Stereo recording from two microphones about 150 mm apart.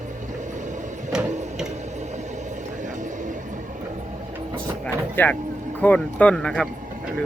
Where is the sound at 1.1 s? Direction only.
5° right (ahead or behind).